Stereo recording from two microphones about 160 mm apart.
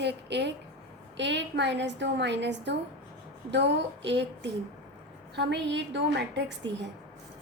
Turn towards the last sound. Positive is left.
turn(degrees=-90)